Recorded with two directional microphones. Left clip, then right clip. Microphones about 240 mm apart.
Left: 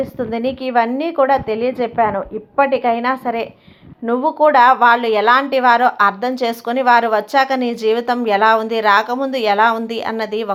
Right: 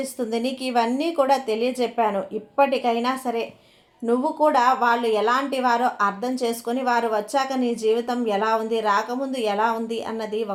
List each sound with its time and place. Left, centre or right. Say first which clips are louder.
0.0 s a woman's voice: left 6 dB; centre